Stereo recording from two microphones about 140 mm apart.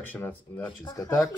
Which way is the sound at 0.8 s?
25° left (ahead or behind).